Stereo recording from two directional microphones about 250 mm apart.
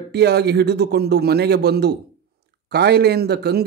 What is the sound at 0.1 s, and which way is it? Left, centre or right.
A man's voice, right.